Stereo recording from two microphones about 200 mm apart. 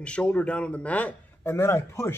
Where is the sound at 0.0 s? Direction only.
5° left (ahead or behind).